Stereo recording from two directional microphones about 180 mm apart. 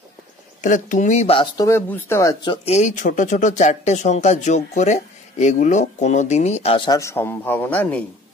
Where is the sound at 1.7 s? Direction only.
10° left (ahead or behind).